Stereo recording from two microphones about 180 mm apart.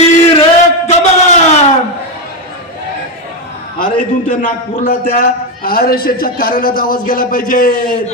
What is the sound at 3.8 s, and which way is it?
A man's voice, 50° left (ahead or behind).